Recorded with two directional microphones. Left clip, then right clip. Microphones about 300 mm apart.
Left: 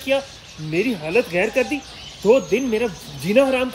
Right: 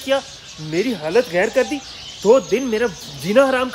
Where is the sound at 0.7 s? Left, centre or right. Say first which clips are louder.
Right 1 dB; centre.